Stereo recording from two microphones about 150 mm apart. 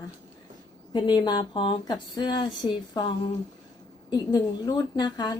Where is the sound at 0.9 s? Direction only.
30° left (ahead or behind).